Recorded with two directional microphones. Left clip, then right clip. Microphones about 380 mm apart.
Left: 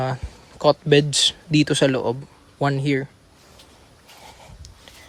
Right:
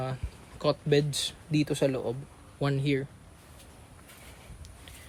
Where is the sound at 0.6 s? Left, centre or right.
Centre.